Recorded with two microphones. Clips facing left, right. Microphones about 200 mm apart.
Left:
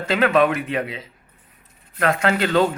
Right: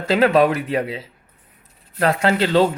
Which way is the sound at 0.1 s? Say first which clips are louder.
Right 3 dB; 35° right (ahead or behind).